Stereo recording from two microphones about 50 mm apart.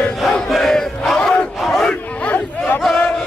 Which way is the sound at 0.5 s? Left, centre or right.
Centre.